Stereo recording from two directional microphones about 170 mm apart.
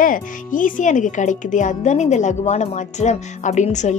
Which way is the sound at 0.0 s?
50° left (ahead or behind).